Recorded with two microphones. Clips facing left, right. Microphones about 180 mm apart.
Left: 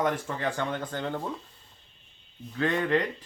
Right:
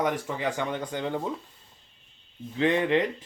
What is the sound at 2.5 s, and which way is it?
Speech, 20° right (ahead or behind).